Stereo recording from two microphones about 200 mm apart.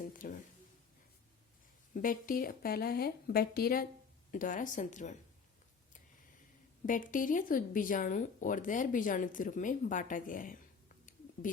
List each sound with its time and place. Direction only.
0.0 s speech: 40° left (ahead or behind)
1.9 s a woman's voice: 45° left (ahead or behind)
6.8 s speech: 40° left (ahead or behind)